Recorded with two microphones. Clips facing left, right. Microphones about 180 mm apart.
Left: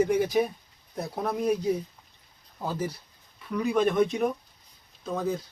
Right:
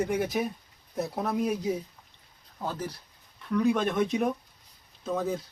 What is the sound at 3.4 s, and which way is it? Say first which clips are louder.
Speech: even; centre (ahead or behind).